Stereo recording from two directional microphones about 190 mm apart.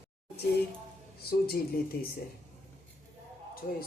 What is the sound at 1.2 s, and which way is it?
Speech, 55° left (ahead or behind).